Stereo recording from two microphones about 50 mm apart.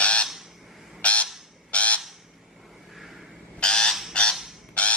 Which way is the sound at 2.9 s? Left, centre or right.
Centre.